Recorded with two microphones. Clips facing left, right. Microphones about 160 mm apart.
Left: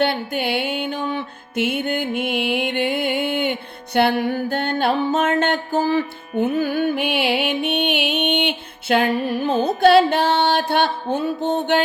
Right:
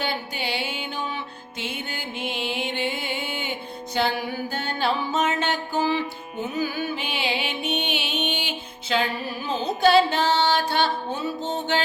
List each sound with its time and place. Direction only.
0.0 s music: 60° left (ahead or behind)